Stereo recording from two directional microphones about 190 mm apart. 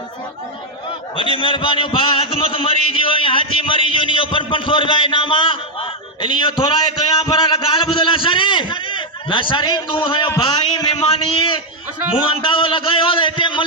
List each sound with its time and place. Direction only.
1.1 s a man's voice: 25° left (ahead or behind)